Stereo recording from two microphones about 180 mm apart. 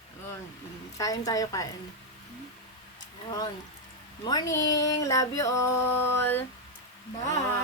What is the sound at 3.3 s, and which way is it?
Speech, 25° left (ahead or behind).